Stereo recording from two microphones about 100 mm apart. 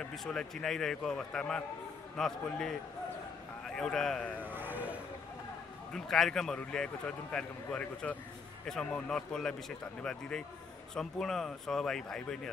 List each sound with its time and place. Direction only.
0.0 s a man's voice: 5° left (ahead or behind)
4.6 s vehicle: 20° right (ahead or behind)
5.9 s a man's voice: 5° left (ahead or behind)